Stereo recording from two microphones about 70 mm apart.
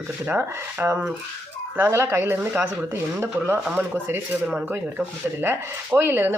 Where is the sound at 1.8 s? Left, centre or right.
Right.